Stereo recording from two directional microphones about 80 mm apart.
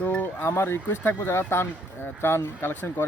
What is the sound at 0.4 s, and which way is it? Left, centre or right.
Speech, left.